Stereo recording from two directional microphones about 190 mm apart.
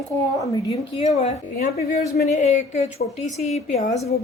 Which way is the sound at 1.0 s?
35° left (ahead or behind).